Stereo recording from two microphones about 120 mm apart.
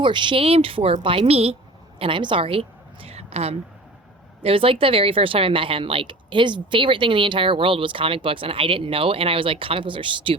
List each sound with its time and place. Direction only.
0.0 s a woman's voice: 40° right (ahead or behind)
2.0 s a woman's voice: 45° right (ahead or behind)